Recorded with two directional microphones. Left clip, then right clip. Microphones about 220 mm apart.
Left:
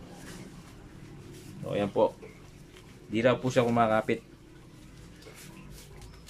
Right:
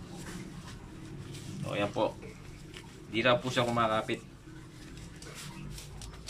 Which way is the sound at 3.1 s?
30° left (ahead or behind).